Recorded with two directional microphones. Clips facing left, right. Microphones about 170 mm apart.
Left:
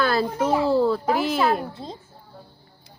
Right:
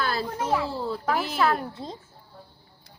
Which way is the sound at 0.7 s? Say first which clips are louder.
Left 11 dB; 80° left.